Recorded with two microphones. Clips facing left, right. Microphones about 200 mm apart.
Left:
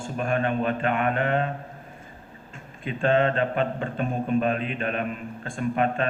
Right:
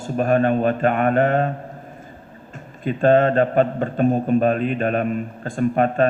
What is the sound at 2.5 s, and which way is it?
A man's voice, 40° right (ahead or behind).